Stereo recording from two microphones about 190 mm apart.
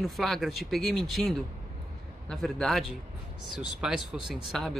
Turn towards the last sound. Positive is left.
turn(degrees=0)  # may be behind; listen again after turning